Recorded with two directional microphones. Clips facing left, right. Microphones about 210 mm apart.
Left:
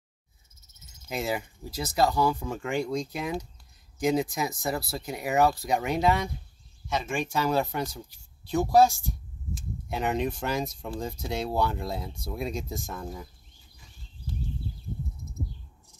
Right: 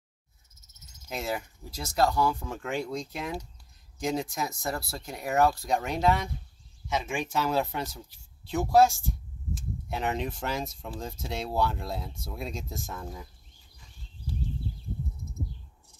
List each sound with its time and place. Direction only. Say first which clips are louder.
1.0 s speech: left 3 dB; centre (ahead or behind)